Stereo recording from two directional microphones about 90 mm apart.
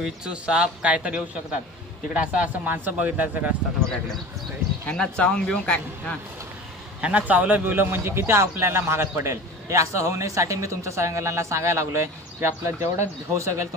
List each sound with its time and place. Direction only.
0.0 s speech: 10° right (ahead or behind)
4.8 s a man's voice: 10° left (ahead or behind)
7.0 s a man's voice: 15° right (ahead or behind); by 13.7 s 35° right (ahead or behind)